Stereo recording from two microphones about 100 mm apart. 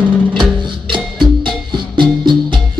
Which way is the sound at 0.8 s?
55° right (ahead or behind).